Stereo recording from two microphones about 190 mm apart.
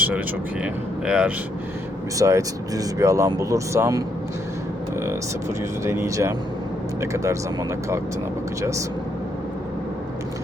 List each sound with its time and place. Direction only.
0.6 s speech: 5° right (ahead or behind)
2.1 s speech: 15° right (ahead or behind)
5.8 s speech: 15° right (ahead or behind)